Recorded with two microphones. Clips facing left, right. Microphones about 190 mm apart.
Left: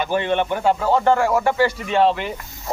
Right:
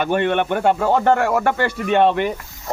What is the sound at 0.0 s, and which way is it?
Speech, 60° right (ahead or behind).